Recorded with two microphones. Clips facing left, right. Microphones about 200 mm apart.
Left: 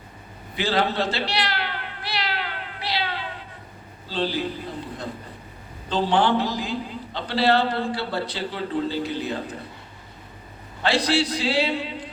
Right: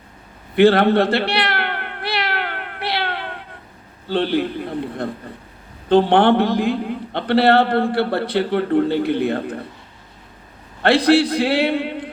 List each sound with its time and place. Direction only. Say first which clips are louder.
0.5 s baby cry: right 11 dB; 60° right (ahead or behind)
4.1 s a man's voice: right 7 dB; 60° right (ahead or behind)
10.8 s a man's voice: right 8 dB; 60° right (ahead or behind)